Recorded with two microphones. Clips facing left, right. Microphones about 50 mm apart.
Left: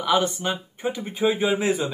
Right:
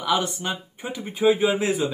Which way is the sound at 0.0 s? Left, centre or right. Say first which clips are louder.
Left 2 dB; centre.